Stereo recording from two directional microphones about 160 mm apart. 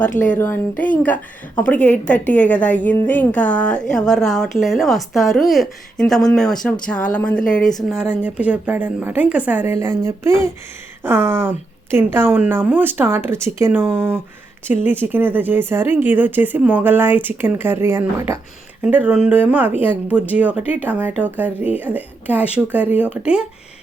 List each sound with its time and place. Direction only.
0.2 s a woman's voice: 15° left (ahead or behind)
1.6 s a woman's voice: 10° left (ahead or behind); by 23.4 s 5° right (ahead or behind)